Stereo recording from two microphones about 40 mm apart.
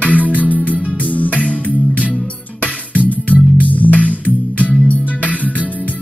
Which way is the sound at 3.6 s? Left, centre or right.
Left.